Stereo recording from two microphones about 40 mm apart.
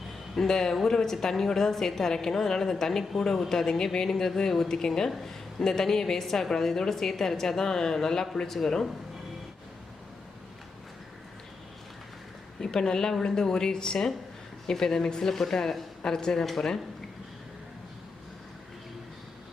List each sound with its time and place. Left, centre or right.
0.3 s a woman's voice: centre
12.5 s a woman's voice: centre